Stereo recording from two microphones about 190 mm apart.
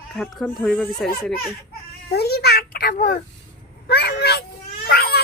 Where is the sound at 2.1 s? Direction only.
55° left (ahead or behind).